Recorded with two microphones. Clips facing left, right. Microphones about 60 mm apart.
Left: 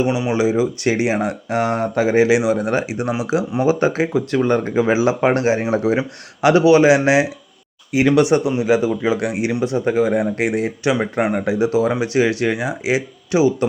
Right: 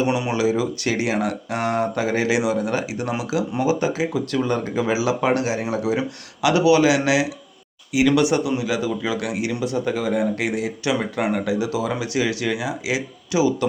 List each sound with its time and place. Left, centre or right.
0.0 s speech: centre
0.3 s speech: left